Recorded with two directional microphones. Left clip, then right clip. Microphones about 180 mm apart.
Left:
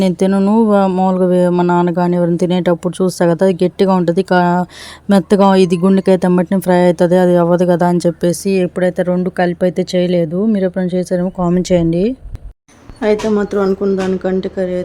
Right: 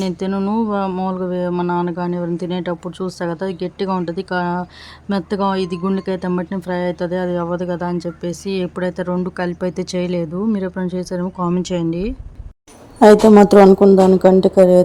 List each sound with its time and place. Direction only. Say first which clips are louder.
0.0 s speech: left 8 dB; 30° left (ahead or behind)
8.6 s a woman's voice: left 7 dB; 20° left (ahead or behind)
13.0 s a woman's voice: right 7 dB; 30° right (ahead or behind)
13.7 s speech: right 6 dB; 10° right (ahead or behind)